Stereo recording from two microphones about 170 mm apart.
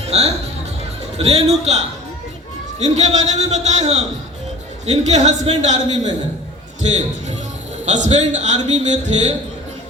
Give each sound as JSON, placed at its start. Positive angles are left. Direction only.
{"t": 0.1, "sound": "a man's voice", "side_deg": -40}
{"t": 7.9, "sound": "a man's voice", "side_deg": -45}